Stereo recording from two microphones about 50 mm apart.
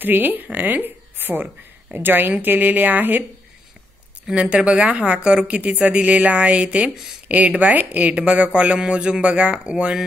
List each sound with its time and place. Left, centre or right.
0.0 s speech: right
4.4 s speech: right
5.6 s speech: right